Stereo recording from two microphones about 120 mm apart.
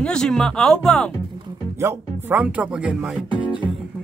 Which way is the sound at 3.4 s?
40° left (ahead or behind).